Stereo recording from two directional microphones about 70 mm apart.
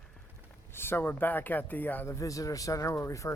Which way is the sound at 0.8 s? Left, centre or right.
Left.